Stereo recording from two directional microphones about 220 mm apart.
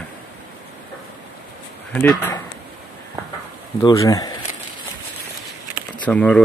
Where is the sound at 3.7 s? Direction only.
15° left (ahead or behind).